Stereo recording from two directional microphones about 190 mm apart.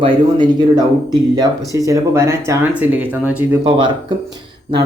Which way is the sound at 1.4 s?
15° right (ahead or behind).